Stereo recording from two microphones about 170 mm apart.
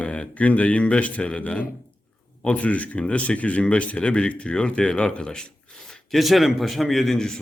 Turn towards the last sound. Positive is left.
turn(degrees=0)  # may be behind; listen again after turning